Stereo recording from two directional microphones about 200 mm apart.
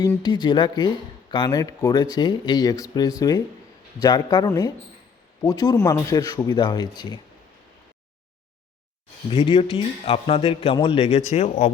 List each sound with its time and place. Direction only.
0.0 s speech: 20° left (ahead or behind)
9.3 s speech: 30° left (ahead or behind)